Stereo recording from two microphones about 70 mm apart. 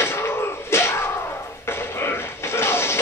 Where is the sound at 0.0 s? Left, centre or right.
Left.